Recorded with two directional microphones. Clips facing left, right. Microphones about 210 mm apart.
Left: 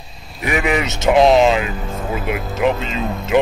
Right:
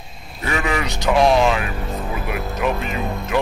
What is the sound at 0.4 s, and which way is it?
Speech, 15° left (ahead or behind).